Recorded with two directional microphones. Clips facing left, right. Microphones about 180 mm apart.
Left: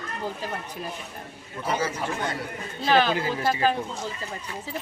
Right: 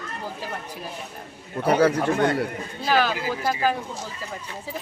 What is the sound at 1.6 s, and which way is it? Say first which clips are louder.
Speech: right 8 dB; 65° right (ahead or behind).